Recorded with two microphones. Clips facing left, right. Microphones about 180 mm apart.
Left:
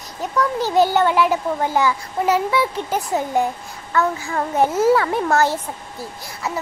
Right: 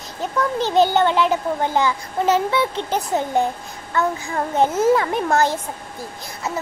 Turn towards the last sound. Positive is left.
turn(degrees=-15)  # may be behind; listen again after turning